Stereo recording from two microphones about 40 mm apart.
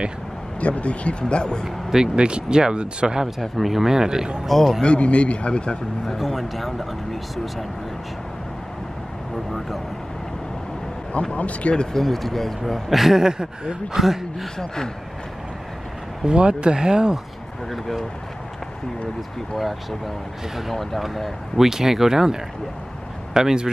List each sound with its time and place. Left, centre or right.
0.6 s a man's voice: left
2.1 s speech: right
3.3 s speech: centre
4.5 s speech: centre
4.8 s a man's voice: left
6.0 s speech: centre
11.3 s speech: left
11.7 s a man's voice: centre
12.0 s speech: centre
12.9 s speech: centre
14.0 s speech: centre
16.3 s speech: right
17.6 s speech: centre
19.5 s speech: centre